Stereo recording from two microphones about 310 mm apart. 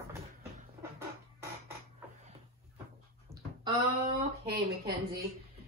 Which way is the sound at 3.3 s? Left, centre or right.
Centre.